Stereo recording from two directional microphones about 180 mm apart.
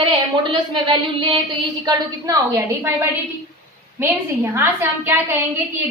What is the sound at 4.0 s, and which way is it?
A woman's voice, 15° right (ahead or behind).